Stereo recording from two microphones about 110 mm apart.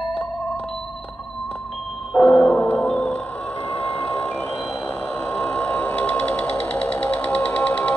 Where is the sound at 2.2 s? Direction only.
20° left (ahead or behind).